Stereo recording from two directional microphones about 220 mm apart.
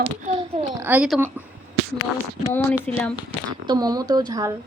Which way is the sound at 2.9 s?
5° left (ahead or behind).